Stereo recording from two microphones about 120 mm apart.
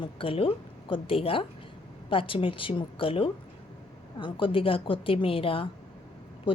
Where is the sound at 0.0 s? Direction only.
50° left (ahead or behind).